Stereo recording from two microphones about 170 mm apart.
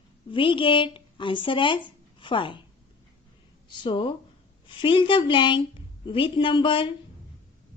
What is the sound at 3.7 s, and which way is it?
Speech, 30° left (ahead or behind).